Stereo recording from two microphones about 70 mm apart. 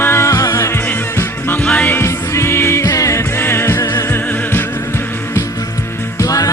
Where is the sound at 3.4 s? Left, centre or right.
Left.